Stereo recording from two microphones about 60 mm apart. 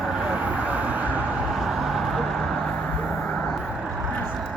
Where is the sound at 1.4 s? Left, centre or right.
Centre.